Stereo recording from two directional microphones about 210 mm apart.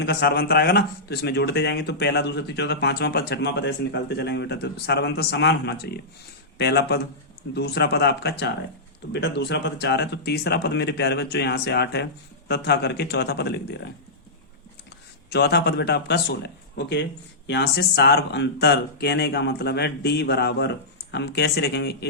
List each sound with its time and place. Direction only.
0.0 s a man's voice: 50° left (ahead or behind)
15.3 s a man's voice: 50° left (ahead or behind)